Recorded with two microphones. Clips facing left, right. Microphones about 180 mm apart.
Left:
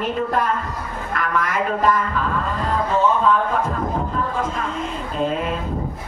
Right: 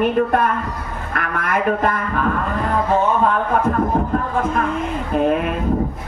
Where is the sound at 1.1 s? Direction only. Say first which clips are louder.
Right 1 dB; 60° right (ahead or behind).